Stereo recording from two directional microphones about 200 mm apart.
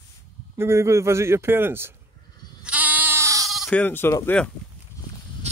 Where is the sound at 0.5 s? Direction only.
15° right (ahead or behind).